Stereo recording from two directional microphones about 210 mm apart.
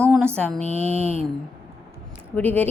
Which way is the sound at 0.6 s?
30° right (ahead or behind).